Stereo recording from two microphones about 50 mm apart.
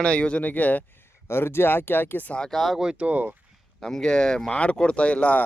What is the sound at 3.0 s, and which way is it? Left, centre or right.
Speech, right.